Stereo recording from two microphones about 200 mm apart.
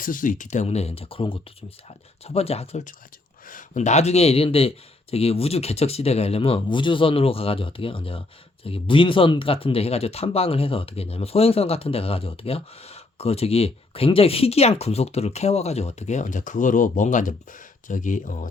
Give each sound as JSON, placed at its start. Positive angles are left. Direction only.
{"t": 0.0, "sound": "speech", "side_deg": 40}